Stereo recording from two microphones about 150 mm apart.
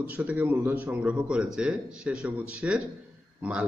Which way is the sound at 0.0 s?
10° right (ahead or behind).